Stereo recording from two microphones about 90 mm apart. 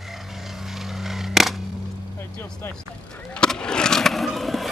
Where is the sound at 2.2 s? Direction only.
25° left (ahead or behind).